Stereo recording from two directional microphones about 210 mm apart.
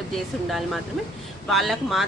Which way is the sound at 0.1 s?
Centre (ahead or behind).